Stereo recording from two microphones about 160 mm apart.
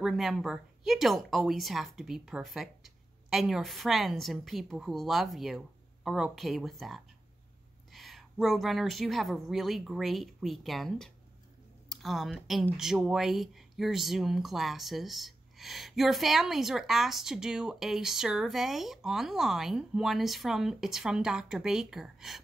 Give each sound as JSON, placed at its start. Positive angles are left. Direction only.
{"t": 0.0, "sound": "speech", "side_deg": 0}